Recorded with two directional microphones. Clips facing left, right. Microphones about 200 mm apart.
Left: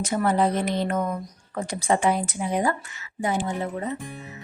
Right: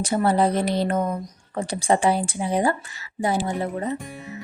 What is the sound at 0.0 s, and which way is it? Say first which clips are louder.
Speech: right 2 dB; 35° right (ahead or behind).